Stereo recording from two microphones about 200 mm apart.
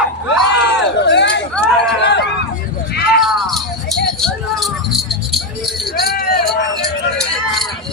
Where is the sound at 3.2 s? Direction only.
Centre (ahead or behind).